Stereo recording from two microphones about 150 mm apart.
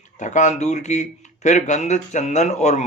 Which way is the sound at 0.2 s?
55° left (ahead or behind).